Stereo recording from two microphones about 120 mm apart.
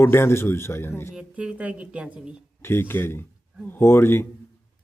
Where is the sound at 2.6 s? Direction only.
20° left (ahead or behind).